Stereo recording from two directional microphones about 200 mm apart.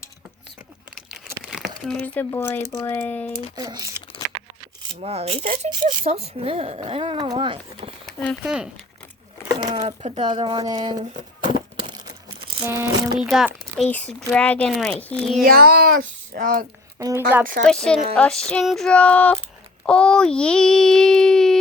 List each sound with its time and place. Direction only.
1.5 s speech: centre (ahead or behind)
3.5 s speech: 20° right (ahead or behind)
4.9 s speech: 30° right (ahead or behind)
8.0 s speech: 5° left (ahead or behind)
9.8 s speech: 30° right (ahead or behind)
11.2 s a sound: 25° right (ahead or behind)
12.6 s speech: 15° right (ahead or behind)
13.2 s a child's voice: centre (ahead or behind)
15.4 s a child's voice: 50° right (ahead or behind)
17.0 s speech: 15° right (ahead or behind)
17.7 s a child's voice: 5° left (ahead or behind)